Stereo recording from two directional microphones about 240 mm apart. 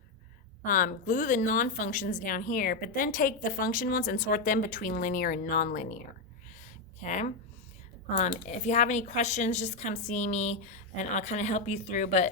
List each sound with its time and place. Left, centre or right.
0.6 s a woman's voice: left
7.0 s a woman's voice: left
8.4 s a woman's voice: left